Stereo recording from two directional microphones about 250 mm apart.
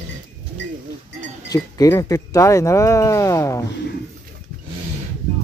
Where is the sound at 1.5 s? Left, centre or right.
Centre.